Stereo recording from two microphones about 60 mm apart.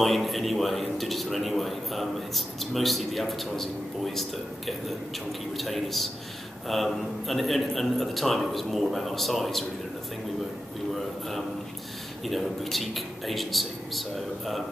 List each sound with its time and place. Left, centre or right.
0.0 s a man's voice: centre
12.3 s a man's voice: centre